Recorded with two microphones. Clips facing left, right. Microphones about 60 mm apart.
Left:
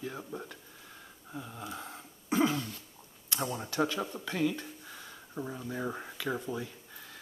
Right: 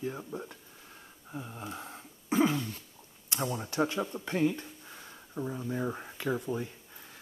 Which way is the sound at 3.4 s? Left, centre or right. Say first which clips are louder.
Right 2 dB; centre.